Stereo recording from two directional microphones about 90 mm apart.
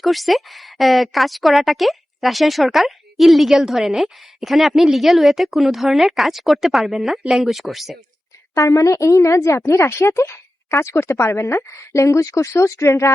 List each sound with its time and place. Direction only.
0.0 s a woman's voice: centre (ahead or behind)
8.5 s a woman's voice: 35° left (ahead or behind)